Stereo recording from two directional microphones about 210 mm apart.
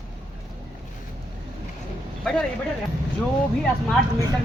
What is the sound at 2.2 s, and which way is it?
Speech, 5° left (ahead or behind).